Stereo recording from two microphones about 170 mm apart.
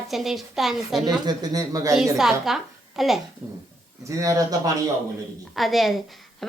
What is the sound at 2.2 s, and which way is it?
A woman's voice, centre (ahead or behind).